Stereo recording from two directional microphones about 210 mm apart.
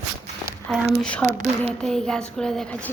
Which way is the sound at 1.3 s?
35° right (ahead or behind).